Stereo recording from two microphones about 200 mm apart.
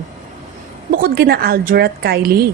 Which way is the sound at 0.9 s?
45° right (ahead or behind).